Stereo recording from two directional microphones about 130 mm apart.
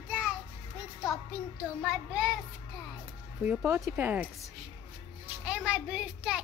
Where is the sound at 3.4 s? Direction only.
10° right (ahead or behind).